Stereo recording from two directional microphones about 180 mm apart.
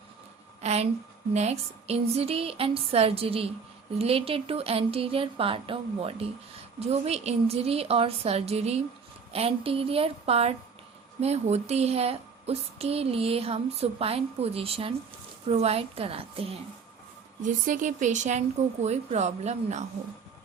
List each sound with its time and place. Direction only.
0.6 s a sound: 35° right (ahead or behind)
1.3 s a woman's voice: 35° right (ahead or behind)
17.4 s a woman's voice: 45° right (ahead or behind)